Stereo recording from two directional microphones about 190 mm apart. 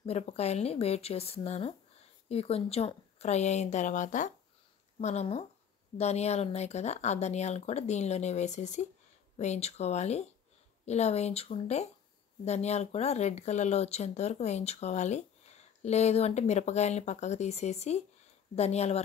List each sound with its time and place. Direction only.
0.0 s speech: 35° left (ahead or behind)